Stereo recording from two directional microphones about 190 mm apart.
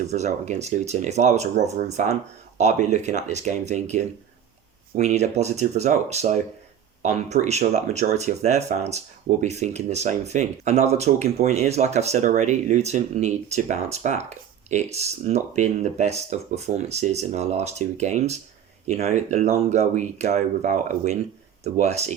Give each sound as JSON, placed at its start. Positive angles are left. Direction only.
{"t": 0.1, "sound": "speech", "side_deg": -40}